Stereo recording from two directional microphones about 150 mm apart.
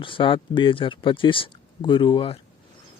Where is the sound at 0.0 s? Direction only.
35° left (ahead or behind).